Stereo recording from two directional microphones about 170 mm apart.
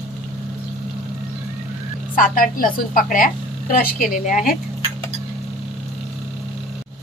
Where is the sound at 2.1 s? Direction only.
55° left (ahead or behind).